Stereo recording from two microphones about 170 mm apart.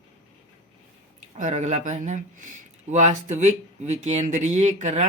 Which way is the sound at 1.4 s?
45° right (ahead or behind).